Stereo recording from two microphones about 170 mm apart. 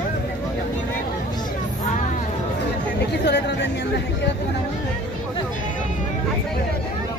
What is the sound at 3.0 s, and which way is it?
Chatter, 85° left.